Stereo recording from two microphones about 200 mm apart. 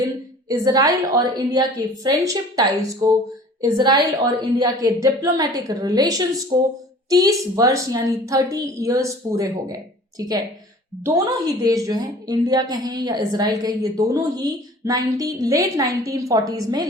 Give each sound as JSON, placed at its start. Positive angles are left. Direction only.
{"t": 0.4, "sound": "a woman's voice", "side_deg": -20}